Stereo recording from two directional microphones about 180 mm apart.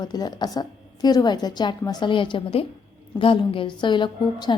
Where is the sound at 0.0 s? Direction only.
20° left (ahead or behind).